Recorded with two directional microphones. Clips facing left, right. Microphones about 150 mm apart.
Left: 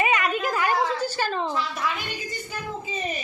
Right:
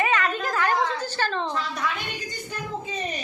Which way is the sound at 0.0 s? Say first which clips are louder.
Left 1 dB; 15° left (ahead or behind).